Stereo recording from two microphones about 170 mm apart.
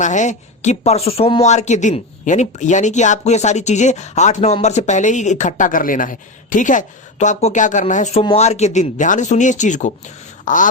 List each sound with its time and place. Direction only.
0.0 s speech: 45° left (ahead or behind)